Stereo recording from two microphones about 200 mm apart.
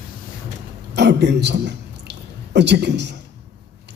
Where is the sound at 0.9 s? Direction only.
60° right (ahead or behind).